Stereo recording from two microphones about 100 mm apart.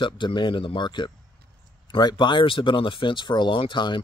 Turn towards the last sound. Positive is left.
turn(degrees=50)  # may be behind; listen again after turning